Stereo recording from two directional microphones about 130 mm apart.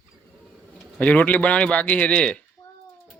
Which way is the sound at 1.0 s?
10° left (ahead or behind).